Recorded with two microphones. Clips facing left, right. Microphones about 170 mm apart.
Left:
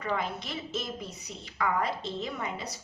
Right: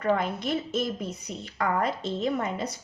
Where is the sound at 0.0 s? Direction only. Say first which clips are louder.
Right 6 dB; 55° right (ahead or behind).